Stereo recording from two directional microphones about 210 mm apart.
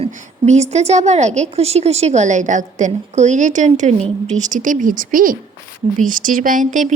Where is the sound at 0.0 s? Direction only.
35° right (ahead or behind).